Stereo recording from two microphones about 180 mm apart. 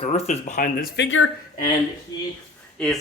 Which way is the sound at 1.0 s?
90° left.